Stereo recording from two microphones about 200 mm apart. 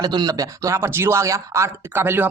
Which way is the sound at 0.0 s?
20° right (ahead or behind).